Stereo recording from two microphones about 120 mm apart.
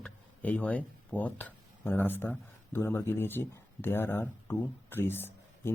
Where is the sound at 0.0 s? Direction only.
10° left (ahead or behind).